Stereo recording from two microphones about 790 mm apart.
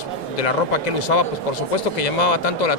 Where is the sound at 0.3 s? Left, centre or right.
Left.